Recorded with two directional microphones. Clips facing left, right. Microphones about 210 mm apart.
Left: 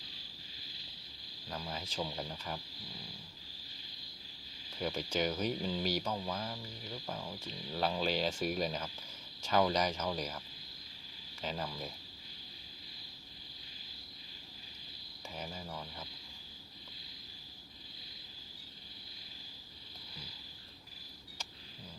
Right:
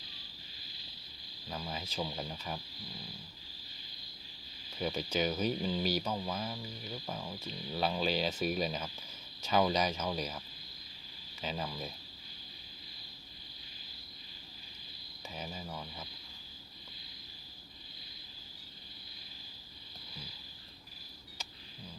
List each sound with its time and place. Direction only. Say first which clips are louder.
1.5 s speech: right 1 dB; 5° right (ahead or behind)
4.8 s speech: right 1 dB; 10° right (ahead or behind)
11.4 s speech: right 1 dB; 10° right (ahead or behind)
15.4 s a sound: right 1 dB; 10° right (ahead or behind)